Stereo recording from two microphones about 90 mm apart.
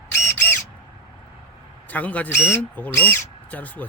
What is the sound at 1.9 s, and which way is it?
Speech, 15° left (ahead or behind).